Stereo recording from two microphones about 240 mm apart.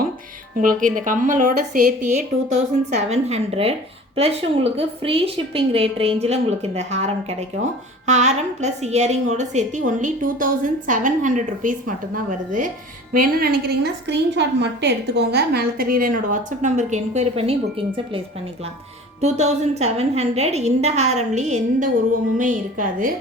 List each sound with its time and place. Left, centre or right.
0.5 s a woman's voice: right
19.2 s a woman's voice: right